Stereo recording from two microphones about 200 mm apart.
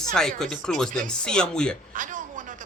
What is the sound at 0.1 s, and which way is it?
Speech, 5° left (ahead or behind).